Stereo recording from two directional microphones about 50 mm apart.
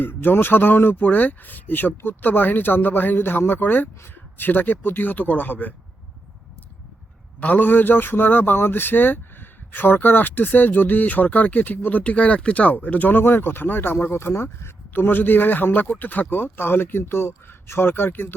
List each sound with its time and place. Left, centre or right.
0.0 s speech: left
7.3 s speech: left
14.9 s speech: left
16.3 s speech: left